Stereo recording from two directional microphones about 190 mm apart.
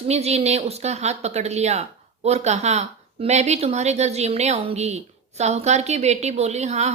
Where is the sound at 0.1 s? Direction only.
35° right (ahead or behind).